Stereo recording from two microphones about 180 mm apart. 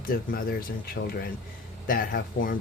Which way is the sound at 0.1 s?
55° left (ahead or behind).